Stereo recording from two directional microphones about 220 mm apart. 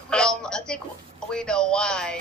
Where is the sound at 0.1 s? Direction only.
5° left (ahead or behind).